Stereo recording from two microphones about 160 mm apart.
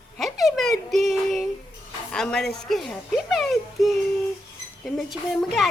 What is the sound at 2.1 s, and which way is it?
A child's voice, 5° left (ahead or behind).